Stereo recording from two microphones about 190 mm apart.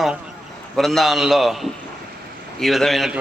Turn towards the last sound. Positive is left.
turn(degrees=0)  # may be behind; listen again after turning